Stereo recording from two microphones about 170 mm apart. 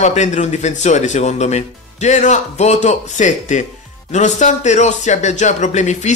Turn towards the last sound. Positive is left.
turn(degrees=45)  # may be behind; listen again after turning